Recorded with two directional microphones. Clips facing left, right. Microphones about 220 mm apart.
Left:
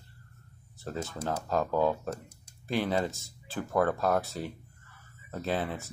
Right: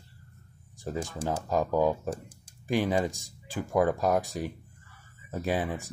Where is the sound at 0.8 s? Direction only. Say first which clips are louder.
Right 2 dB; 15° right (ahead or behind).